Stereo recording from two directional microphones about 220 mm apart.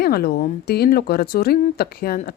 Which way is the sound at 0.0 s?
45° left (ahead or behind).